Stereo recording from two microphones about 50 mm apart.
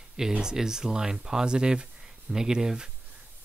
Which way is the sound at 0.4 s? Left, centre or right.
Centre.